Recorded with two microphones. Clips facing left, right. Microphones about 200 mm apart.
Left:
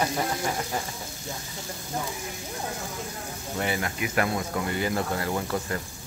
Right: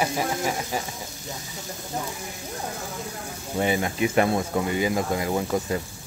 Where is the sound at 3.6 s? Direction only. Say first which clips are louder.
Right 6 dB; 20° right (ahead or behind).